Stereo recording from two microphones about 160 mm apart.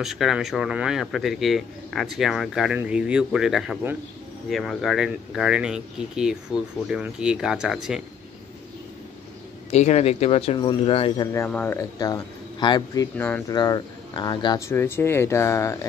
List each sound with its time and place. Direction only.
0.0 s speech: centre (ahead or behind)
9.7 s speech: 45° left (ahead or behind)
11.3 s speech: 15° left (ahead or behind)
12.0 s speech: 25° left (ahead or behind)
14.7 s speech: 15° left (ahead or behind)